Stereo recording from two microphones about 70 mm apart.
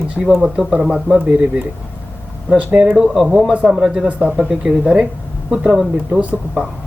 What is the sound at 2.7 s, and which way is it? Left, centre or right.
Speech, centre.